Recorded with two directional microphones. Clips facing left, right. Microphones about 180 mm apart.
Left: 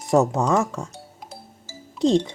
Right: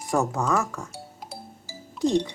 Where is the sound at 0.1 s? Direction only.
25° left (ahead or behind).